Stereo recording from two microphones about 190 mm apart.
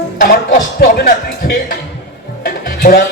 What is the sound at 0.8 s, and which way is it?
Speech, 55° left (ahead or behind).